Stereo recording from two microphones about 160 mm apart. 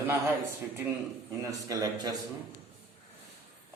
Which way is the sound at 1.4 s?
20° right (ahead or behind).